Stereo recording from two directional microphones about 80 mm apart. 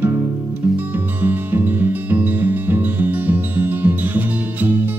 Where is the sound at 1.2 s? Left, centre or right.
Right.